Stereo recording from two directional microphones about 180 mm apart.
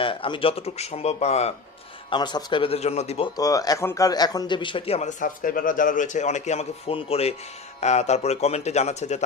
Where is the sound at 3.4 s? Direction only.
20° left (ahead or behind).